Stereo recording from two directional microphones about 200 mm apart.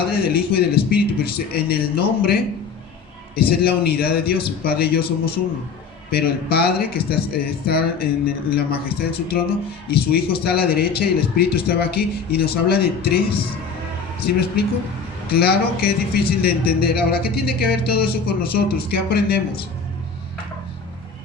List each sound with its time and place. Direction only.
0.1 s speech: 50° left (ahead or behind)
3.6 s speech: 50° left (ahead or behind)
14.3 s speech: 50° left (ahead or behind)